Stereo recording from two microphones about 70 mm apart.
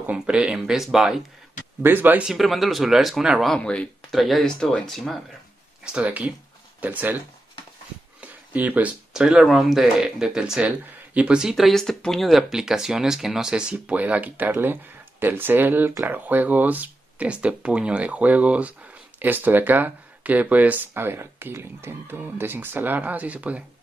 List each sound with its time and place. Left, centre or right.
0.0 s speech: centre
1.8 s speech: right
2.2 s speech: centre
3.5 s speech: centre
4.1 s speech: centre
5.9 s speech: centre
8.2 s a sound: right
9.1 s speech: centre
11.4 s speech: centre; by 23.6 s right